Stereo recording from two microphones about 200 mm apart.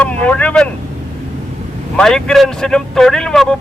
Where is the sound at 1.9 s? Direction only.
5° left (ahead or behind).